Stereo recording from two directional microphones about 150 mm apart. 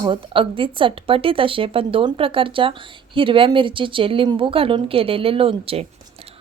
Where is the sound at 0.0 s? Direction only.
35° right (ahead or behind).